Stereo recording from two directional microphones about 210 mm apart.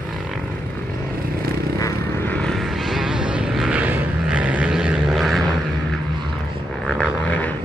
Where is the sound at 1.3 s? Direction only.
45° right (ahead or behind).